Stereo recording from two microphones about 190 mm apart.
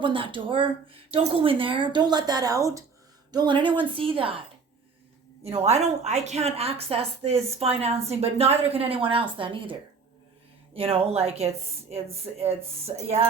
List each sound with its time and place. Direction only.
0.0 s speech: 25° right (ahead or behind)
5.4 s a woman's voice: 35° right (ahead or behind)
10.8 s a woman's voice: 30° right (ahead or behind)
12.9 s speech: 25° right (ahead or behind)